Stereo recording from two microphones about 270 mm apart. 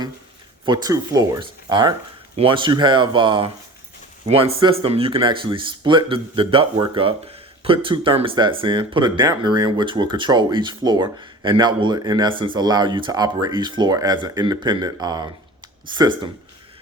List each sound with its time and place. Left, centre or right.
0.6 s speech: centre